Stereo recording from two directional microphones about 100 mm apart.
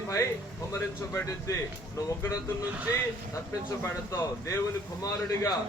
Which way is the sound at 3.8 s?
30° left (ahead or behind).